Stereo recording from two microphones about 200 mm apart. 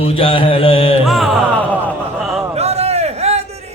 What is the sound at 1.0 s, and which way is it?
Music, centre (ahead or behind).